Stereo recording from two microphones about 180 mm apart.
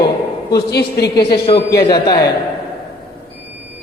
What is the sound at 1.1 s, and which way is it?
A woman's voice, 25° left (ahead or behind).